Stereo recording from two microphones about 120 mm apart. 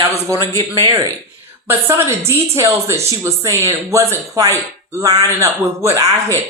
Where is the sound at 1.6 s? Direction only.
20° right (ahead or behind).